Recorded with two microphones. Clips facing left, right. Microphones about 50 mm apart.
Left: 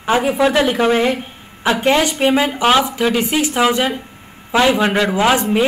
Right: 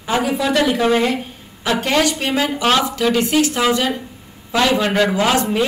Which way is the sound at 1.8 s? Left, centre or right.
Left.